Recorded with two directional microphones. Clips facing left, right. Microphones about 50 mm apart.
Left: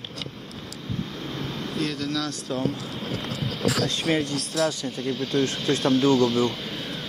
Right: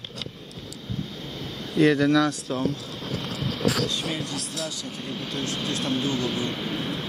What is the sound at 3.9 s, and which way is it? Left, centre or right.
Speech, left.